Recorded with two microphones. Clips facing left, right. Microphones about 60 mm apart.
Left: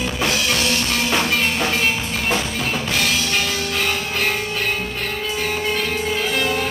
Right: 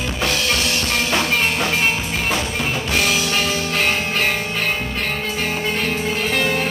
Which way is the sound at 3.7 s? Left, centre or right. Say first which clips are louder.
Right 4 dB; right.